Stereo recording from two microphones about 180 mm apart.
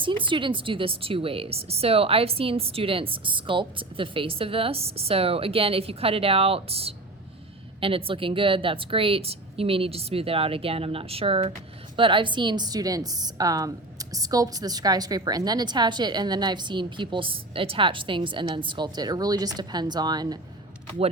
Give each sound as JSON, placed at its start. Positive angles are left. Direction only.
{"t": 0.0, "sound": "a woman's voice", "side_deg": -25}